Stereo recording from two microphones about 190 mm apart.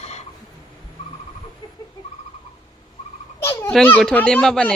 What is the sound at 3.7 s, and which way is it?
Speech, 5° left (ahead or behind).